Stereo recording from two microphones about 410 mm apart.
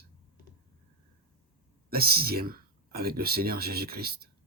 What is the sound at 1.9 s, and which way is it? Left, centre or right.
Speech, right.